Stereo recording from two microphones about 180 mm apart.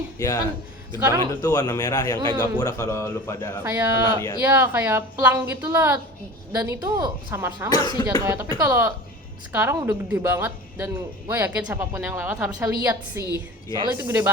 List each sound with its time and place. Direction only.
0.2 s a man's voice: 20° left (ahead or behind)
0.9 s a man's voice: 20° right (ahead or behind)
1.4 s a man's voice: 20° left (ahead or behind)
2.1 s a man's voice: 25° right (ahead or behind)
2.4 s a man's voice: 20° left (ahead or behind)
3.6 s a man's voice: 15° right (ahead or behind)